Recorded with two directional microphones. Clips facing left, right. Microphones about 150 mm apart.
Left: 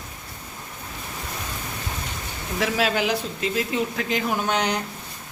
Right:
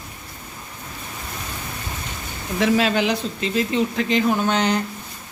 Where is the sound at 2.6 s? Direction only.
5° left (ahead or behind).